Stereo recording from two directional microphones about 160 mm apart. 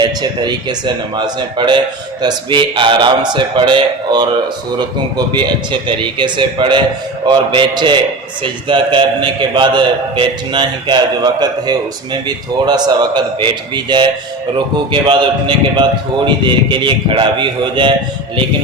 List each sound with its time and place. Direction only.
0.0 s a man's voice: 25° right (ahead or behind)